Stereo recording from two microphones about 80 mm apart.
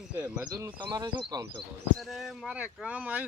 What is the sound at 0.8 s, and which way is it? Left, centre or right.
Speech, right.